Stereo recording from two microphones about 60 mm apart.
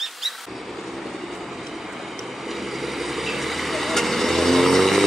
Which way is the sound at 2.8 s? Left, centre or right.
Centre.